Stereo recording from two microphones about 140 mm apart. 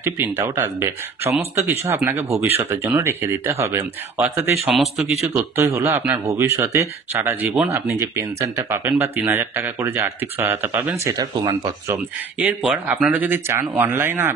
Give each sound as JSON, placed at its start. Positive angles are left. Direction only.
{"t": 0.0, "sound": "speech", "side_deg": -15}
{"t": 4.2, "sound": "speech", "side_deg": 0}
{"t": 5.2, "sound": "speech", "side_deg": -20}
{"t": 11.1, "sound": "speech", "side_deg": -25}
{"t": 12.4, "sound": "speech", "side_deg": -10}